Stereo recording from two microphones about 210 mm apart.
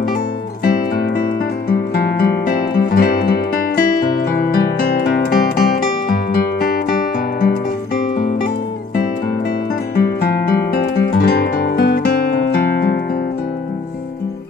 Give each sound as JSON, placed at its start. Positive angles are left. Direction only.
{"t": 0.7, "sound": "music", "side_deg": 45}
{"t": 9.9, "sound": "music", "side_deg": 45}